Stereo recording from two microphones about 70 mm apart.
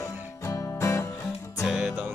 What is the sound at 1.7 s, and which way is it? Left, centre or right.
Music, centre.